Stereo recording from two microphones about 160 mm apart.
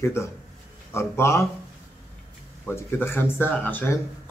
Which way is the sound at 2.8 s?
15° left (ahead or behind).